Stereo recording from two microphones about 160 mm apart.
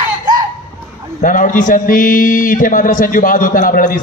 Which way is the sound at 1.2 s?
55° left (ahead or behind).